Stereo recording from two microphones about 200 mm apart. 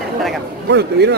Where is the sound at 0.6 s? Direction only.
60° right (ahead or behind).